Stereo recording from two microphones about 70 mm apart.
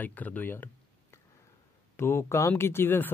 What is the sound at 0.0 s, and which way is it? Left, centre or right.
Speech, left.